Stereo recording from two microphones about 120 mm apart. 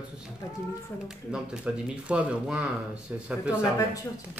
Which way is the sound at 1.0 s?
5° right (ahead or behind).